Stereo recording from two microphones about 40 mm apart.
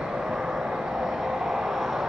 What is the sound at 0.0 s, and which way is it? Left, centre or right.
Vehicle, centre.